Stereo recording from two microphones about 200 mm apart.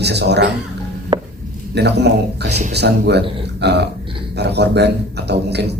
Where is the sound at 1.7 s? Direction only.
55° right (ahead or behind).